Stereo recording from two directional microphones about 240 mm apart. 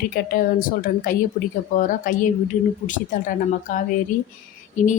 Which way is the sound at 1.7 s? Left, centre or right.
Left.